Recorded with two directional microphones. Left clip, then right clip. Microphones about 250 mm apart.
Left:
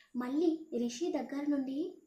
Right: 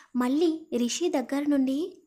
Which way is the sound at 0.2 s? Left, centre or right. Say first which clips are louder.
Right 7 dB; right.